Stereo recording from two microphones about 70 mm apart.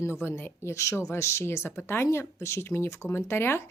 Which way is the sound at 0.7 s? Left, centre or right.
Left.